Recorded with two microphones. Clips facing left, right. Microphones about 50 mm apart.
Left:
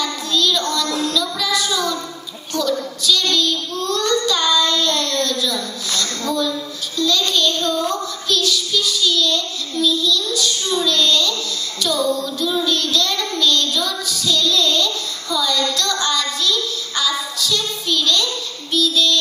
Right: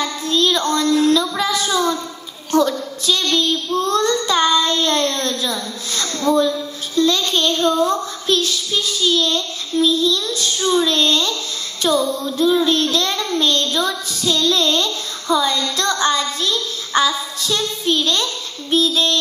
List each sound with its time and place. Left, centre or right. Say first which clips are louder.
0.0 s child singing: right 2 dB; right
1.0 s music: right 5 dB; right
2.5 s child singing: right 4 dB; right